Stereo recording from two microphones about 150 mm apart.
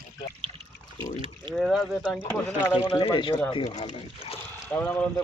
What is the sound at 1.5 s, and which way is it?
Speech, centre (ahead or behind).